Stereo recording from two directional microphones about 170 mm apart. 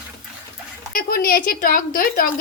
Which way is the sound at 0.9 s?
60° left (ahead or behind).